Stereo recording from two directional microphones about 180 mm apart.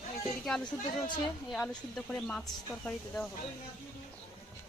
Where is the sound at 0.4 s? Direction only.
5° left (ahead or behind).